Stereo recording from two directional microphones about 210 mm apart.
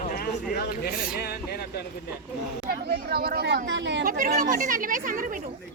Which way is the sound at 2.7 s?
45° right (ahead or behind).